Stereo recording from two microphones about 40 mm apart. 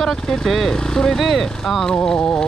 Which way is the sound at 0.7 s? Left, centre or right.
Centre.